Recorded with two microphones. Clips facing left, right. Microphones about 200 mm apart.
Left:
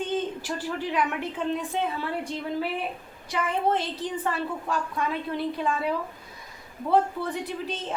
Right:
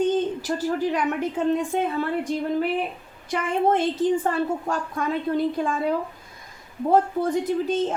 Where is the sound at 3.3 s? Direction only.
50° right (ahead or behind).